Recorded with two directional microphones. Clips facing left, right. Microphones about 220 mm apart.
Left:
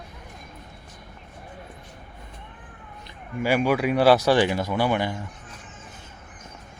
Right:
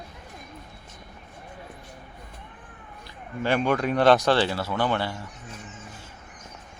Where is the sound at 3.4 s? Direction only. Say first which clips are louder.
Left 2 dB; 10° left (ahead or behind).